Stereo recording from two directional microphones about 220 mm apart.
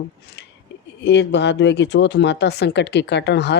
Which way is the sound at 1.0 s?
55° left (ahead or behind).